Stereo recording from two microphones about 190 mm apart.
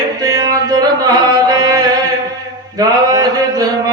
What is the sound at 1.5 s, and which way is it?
Chant, 20° right (ahead or behind).